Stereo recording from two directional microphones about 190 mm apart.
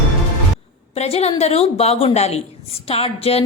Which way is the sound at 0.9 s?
35° left (ahead or behind).